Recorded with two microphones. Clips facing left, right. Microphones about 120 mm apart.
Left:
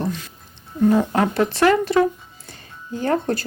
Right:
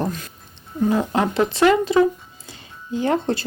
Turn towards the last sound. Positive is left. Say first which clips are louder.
# right 1 dB
turn(degrees=-20)  # may be behind; listen again after turning